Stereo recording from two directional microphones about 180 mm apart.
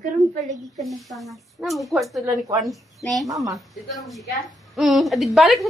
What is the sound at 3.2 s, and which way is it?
Speech, 20° right (ahead or behind).